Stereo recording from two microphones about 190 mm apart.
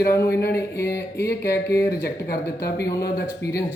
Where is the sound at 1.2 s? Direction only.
55° left (ahead or behind).